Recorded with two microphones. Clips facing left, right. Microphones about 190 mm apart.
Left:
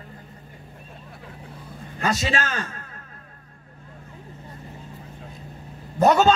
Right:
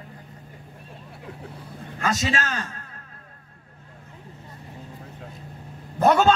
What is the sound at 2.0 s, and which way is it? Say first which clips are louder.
Speech: left 1 dB; 45° right (ahead or behind).